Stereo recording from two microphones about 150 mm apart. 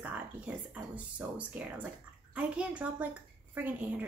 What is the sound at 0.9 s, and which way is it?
Speech, 10° right (ahead or behind).